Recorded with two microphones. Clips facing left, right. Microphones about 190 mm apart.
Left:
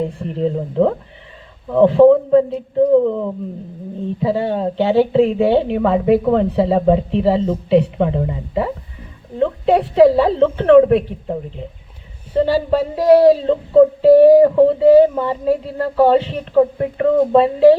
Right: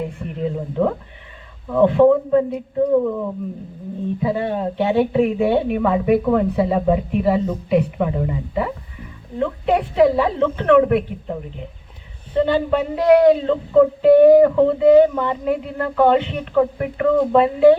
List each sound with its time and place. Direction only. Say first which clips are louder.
0.0 s a woman's voice: left 5 dB; 30° left (ahead or behind)
9.4 s music: left 4 dB; 30° left (ahead or behind)
12.5 s music: left 2 dB; 35° left (ahead or behind)